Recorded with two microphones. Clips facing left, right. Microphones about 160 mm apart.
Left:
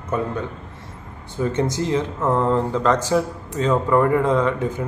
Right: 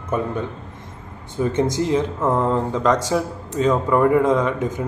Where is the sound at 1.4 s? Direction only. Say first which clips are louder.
Right 2 dB; 20° right (ahead or behind).